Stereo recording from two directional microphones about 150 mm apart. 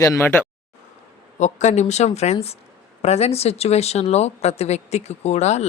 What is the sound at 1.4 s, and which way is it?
Speech, 50° left (ahead or behind).